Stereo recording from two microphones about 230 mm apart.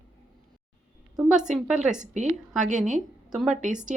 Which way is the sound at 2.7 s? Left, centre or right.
Right.